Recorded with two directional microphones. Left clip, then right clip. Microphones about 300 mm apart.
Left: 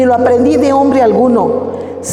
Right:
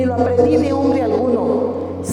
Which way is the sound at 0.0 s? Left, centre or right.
Left.